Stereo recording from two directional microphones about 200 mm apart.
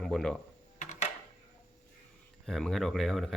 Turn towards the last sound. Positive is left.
turn(degrees=0)  # may be behind; listen again after turning